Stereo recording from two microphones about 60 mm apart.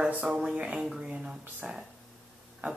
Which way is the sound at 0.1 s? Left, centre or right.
Right.